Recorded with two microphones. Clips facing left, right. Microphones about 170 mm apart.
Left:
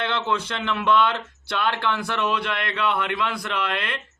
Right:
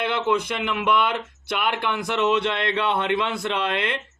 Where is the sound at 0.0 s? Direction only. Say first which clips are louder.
Right 3 dB; 15° right (ahead or behind).